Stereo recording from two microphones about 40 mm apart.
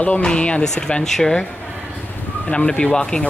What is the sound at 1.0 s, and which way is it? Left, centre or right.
Speech, centre.